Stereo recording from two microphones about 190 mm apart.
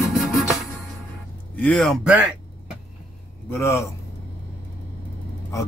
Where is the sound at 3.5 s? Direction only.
15° left (ahead or behind).